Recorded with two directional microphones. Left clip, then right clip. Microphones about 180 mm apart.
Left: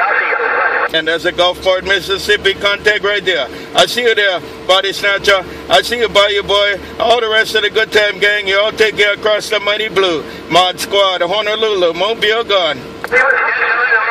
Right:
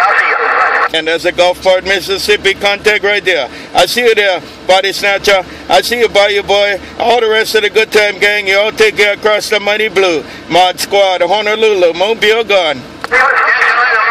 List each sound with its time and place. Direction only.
0.0 s speech: 45° right (ahead or behind)